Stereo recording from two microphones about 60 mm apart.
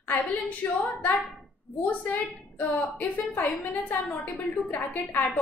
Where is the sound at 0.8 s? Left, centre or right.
Left.